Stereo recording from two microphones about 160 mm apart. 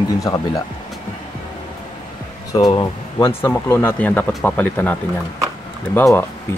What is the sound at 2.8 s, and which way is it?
Speech, 25° left (ahead or behind).